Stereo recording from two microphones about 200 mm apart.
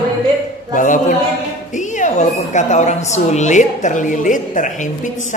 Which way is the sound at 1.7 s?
40° left (ahead or behind).